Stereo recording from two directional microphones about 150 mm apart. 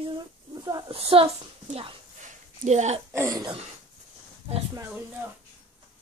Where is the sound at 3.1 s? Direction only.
20° right (ahead or behind).